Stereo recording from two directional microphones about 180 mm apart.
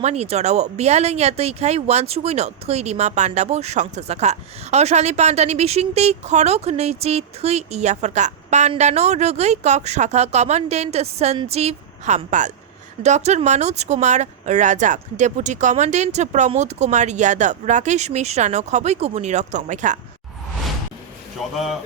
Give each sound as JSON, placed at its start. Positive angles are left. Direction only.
{"t": 0.0, "sound": "speech", "side_deg": -35}
{"t": 21.5, "sound": "speech", "side_deg": 0}